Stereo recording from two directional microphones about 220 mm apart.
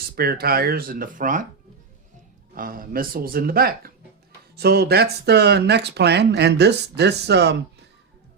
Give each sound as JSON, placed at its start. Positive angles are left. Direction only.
{"t": 0.2, "sound": "speech", "side_deg": -45}
{"t": 2.6, "sound": "speech", "side_deg": -40}